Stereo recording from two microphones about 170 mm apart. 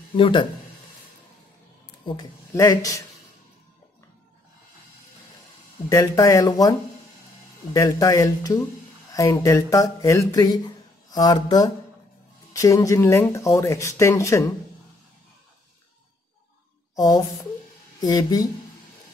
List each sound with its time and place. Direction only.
0.1 s speech: 30° left (ahead or behind)
2.0 s speech: 20° left (ahead or behind)
5.9 s speech: 20° left (ahead or behind)
16.9 s speech: 20° left (ahead or behind)